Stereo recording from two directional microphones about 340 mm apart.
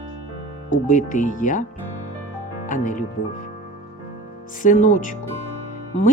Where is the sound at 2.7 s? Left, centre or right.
Left.